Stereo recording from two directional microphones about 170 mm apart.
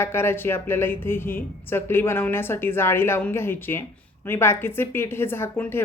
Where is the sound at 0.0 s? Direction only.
15° left (ahead or behind).